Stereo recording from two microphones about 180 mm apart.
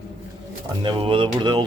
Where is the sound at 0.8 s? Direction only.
25° right (ahead or behind).